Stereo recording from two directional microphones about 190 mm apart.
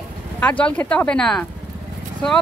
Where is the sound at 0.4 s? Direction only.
10° left (ahead or behind).